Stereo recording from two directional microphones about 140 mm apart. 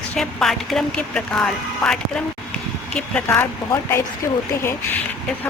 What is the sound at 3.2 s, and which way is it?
Speech, 15° left (ahead or behind).